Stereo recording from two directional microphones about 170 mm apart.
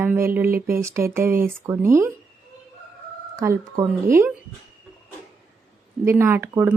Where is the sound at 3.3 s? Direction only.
20° right (ahead or behind).